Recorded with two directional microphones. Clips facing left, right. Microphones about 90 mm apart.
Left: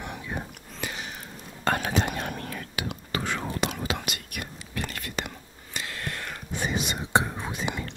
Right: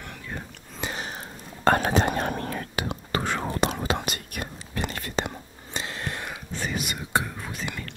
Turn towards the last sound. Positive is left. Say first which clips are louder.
# left 3 dB
turn(degrees=20)  # may be behind; listen again after turning